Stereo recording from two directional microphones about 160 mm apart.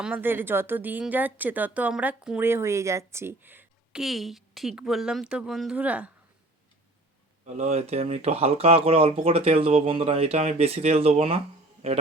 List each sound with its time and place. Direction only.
0.0 s a woman's voice: 10° right (ahead or behind)
4.0 s speech: centre (ahead or behind)
7.4 s speech: 45° right (ahead or behind)